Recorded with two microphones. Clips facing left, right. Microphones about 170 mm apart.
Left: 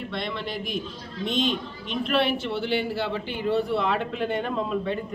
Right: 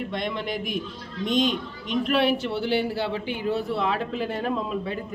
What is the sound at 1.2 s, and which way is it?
Speech, 40° right (ahead or behind).